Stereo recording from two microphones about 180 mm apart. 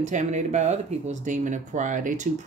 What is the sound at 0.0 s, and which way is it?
Speech, 40° right (ahead or behind).